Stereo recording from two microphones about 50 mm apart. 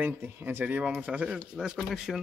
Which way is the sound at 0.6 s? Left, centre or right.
Right.